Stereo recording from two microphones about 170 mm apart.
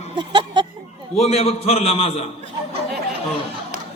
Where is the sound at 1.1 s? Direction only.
40° left (ahead or behind).